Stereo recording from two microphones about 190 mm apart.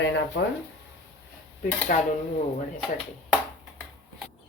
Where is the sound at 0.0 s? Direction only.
70° left (ahead or behind).